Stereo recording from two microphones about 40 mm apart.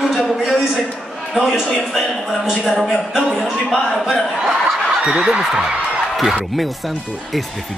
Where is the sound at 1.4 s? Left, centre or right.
Centre.